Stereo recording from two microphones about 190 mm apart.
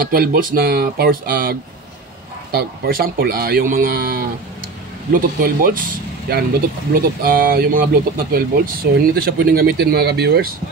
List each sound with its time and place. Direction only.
0.1 s speech: 50° right (ahead or behind)
6.9 s speech: 50° right (ahead or behind)